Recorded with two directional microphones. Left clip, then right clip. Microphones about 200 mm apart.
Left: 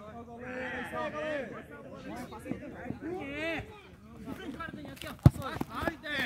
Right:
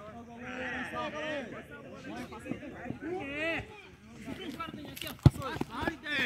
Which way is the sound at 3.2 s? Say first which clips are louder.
Right 2 dB; 20° right (ahead or behind).